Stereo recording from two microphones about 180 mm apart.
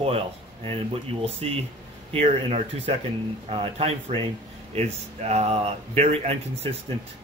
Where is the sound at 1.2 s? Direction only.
35° right (ahead or behind).